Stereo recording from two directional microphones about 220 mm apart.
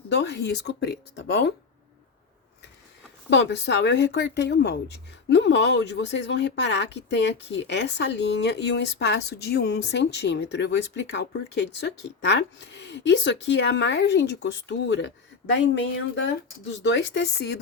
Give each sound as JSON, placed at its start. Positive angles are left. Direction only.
{"t": 0.1, "sound": "speech", "side_deg": 50}
{"t": 3.2, "sound": "speech", "side_deg": 50}